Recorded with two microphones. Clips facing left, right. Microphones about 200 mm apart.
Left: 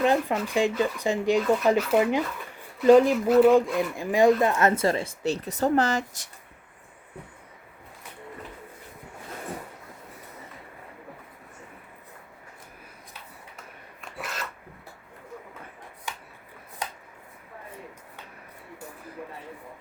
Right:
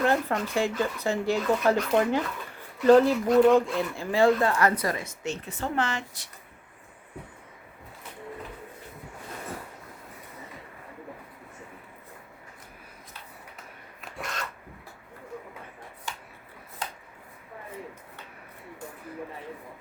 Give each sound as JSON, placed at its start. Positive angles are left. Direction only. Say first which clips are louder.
{"t": 0.0, "sound": "speech", "louder": "left 2 dB", "side_deg": 15}
{"t": 14.0, "sound": "filing", "louder": "even", "side_deg": 5}